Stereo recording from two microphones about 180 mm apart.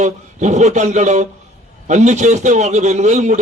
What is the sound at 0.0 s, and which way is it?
A man's voice, 40° right (ahead or behind).